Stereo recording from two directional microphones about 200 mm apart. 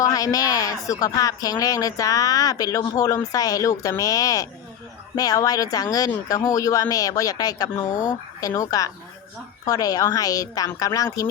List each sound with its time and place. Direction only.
0.0 s a woman's voice: 15° left (ahead or behind)